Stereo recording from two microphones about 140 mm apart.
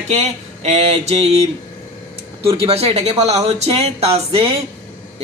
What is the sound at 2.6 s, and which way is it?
Speech, 45° right (ahead or behind).